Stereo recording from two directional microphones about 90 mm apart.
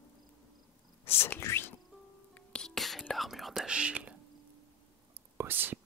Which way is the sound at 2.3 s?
10° left (ahead or behind).